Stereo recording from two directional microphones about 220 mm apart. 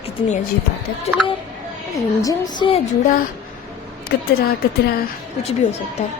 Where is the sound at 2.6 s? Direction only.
25° left (ahead or behind).